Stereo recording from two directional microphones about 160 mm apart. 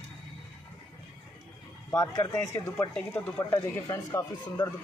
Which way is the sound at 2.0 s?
20° left (ahead or behind).